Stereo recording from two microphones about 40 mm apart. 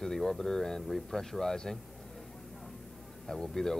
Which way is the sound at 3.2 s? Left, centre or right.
Centre.